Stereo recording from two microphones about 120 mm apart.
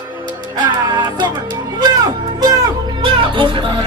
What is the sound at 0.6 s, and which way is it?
Music, 40° right (ahead or behind).